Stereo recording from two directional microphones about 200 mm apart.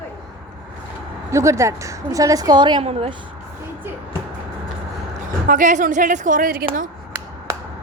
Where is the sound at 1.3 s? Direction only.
15° right (ahead or behind).